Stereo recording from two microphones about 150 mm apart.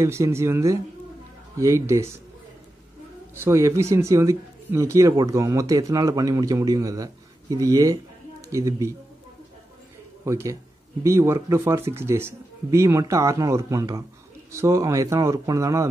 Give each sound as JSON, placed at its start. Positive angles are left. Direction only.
{"t": 0.0, "sound": "speech", "side_deg": -20}
{"t": 3.3, "sound": "speech", "side_deg": -15}
{"t": 10.2, "sound": "speech", "side_deg": -20}